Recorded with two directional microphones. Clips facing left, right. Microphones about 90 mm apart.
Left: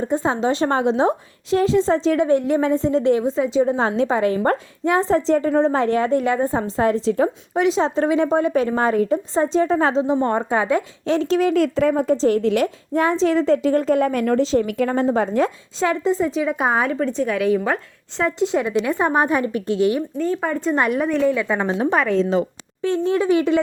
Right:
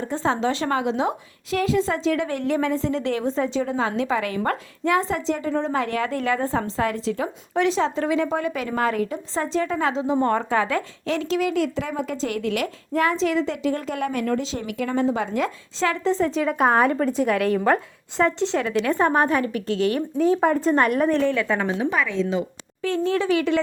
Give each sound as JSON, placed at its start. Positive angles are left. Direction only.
{"t": 0.1, "sound": "a woman's voice", "side_deg": 15}
{"t": 3.2, "sound": "speech", "side_deg": 5}
{"t": 3.6, "sound": "a woman's voice", "side_deg": 30}
{"t": 11.5, "sound": "speech", "side_deg": 50}
{"t": 12.2, "sound": "a woman's voice", "side_deg": 30}
{"t": 16.0, "sound": "a woman's voice", "side_deg": 5}
{"t": 20.3, "sound": "speech", "side_deg": -5}
{"t": 20.7, "sound": "speech", "side_deg": 5}
{"t": 21.3, "sound": "speech", "side_deg": 15}
{"t": 21.8, "sound": "a woman's voice", "side_deg": 40}
{"t": 22.8, "sound": "a woman's voice", "side_deg": 20}